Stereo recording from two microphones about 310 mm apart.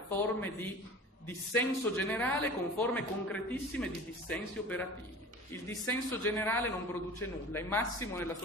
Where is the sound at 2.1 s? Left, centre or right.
Centre.